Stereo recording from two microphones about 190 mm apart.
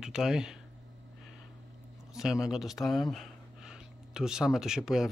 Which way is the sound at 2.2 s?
5° right (ahead or behind).